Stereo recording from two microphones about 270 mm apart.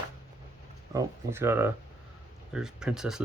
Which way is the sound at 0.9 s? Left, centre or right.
Centre.